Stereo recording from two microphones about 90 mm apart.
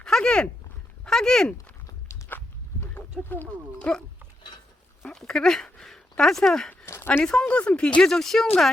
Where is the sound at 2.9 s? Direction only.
25° left (ahead or behind).